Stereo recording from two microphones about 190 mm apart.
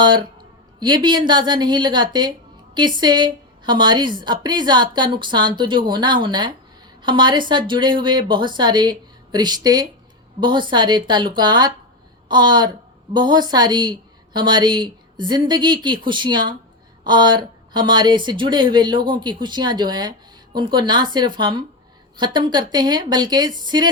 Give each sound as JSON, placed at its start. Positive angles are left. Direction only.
{"t": 0.0, "sound": "speech", "side_deg": -25}